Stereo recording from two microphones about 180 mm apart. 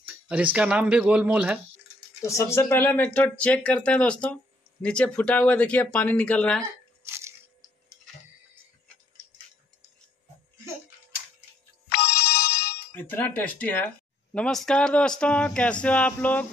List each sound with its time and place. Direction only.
0.0 s speech: 5° right (ahead or behind)
2.2 s speech: 15° left (ahead or behind)
7.1 s crunch: 15° right (ahead or behind)
11.9 s music: 65° left (ahead or behind)
12.7 s speech: 10° left (ahead or behind)